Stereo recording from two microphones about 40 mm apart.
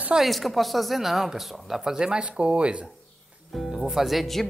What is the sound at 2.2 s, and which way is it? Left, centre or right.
Speech, right.